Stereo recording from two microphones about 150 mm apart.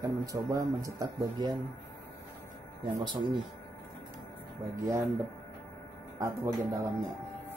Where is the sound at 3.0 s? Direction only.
30° right (ahead or behind).